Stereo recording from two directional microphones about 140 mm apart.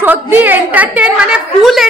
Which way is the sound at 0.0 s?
15° right (ahead or behind).